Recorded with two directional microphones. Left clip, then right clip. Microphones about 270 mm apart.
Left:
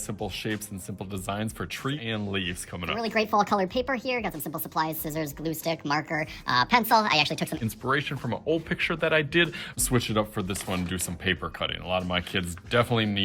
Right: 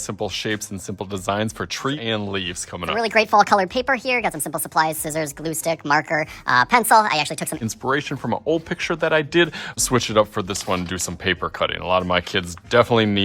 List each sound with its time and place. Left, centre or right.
0.1 s a woman's voice: right